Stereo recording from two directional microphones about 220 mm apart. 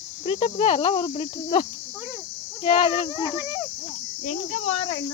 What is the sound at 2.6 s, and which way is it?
Speech, 25° left (ahead or behind).